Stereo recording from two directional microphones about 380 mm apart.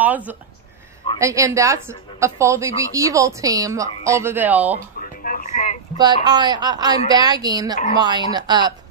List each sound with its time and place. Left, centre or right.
0.0 s a woman's voice: centre
5.2 s a sound: left
5.9 s a woman's voice: centre